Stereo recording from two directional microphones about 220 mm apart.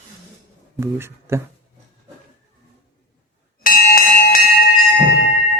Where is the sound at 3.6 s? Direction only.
40° left (ahead or behind).